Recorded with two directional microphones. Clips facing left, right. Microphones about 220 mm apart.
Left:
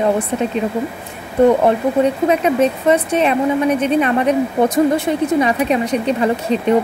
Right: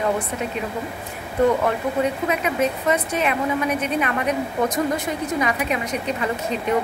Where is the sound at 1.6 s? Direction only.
30° left (ahead or behind).